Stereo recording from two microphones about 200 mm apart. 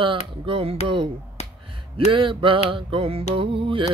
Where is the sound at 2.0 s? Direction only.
25° right (ahead or behind).